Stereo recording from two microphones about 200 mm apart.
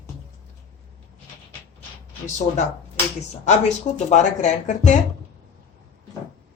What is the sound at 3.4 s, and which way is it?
Speech, 35° left (ahead or behind).